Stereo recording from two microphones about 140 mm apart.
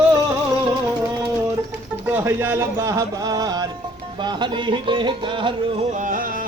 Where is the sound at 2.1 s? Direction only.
15° right (ahead or behind); by 5.8 s 35° right (ahead or behind).